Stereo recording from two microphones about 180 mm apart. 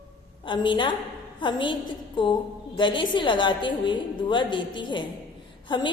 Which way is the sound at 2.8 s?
25° left (ahead or behind).